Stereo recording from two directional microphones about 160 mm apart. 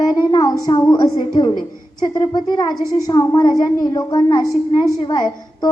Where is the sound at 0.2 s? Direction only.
25° left (ahead or behind).